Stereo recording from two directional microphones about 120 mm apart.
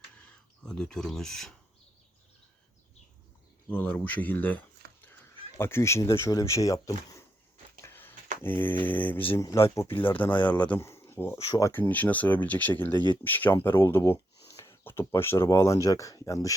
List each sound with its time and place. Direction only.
0.6 s speech: 5° left (ahead or behind)
3.7 s speech: 15° left (ahead or behind); by 7.3 s 30° left (ahead or behind)
7.8 s a sound: 20° left (ahead or behind)
8.4 s speech: 15° left (ahead or behind)
10.8 s a sound: 20° left (ahead or behind)
11.4 s speech: 30° left (ahead or behind)
11.7 s speech: 15° left (ahead or behind)